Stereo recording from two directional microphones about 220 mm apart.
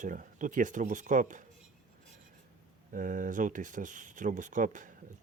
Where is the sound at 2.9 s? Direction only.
35° right (ahead or behind).